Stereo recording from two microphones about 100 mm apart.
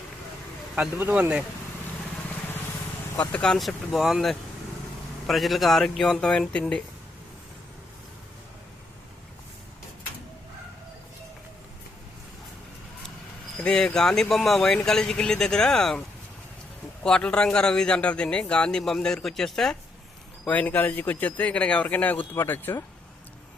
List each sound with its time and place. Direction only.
1.1 s speech: 10° right (ahead or behind)
3.2 s speech: 10° left (ahead or behind)
13.6 s a man's voice: 10° left (ahead or behind)
20.4 s a man's voice: 15° left (ahead or behind)